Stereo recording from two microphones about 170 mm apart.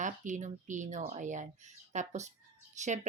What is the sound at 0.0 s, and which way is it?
Speech, 45° right (ahead or behind).